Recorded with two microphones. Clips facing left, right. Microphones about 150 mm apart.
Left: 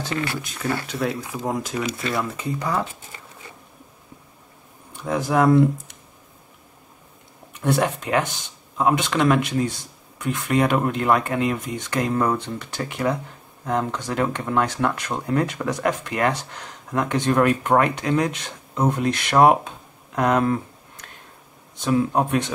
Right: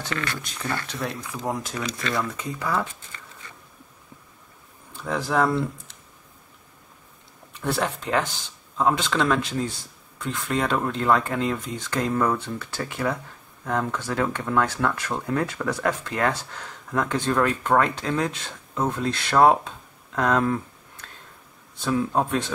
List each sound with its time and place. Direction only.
0.3 s speech: 10° left (ahead or behind)
2.6 s speech: 25° left (ahead or behind)
4.9 s speech: 15° left (ahead or behind)
7.6 s speech: 20° left (ahead or behind)
21.7 s speech: 20° left (ahead or behind)